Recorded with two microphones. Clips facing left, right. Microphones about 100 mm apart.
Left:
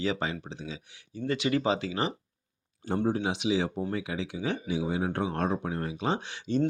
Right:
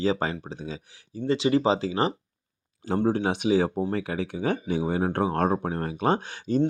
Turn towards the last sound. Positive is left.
turn(degrees=-45)  # may be behind; listen again after turning